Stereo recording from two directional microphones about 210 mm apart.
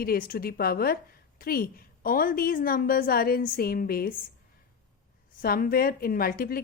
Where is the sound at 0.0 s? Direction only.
45° left (ahead or behind).